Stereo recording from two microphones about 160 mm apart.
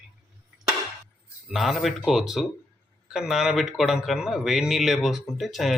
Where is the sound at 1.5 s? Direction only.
Centre (ahead or behind).